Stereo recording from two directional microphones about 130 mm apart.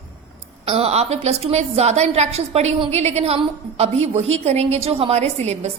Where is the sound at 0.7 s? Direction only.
50° right (ahead or behind).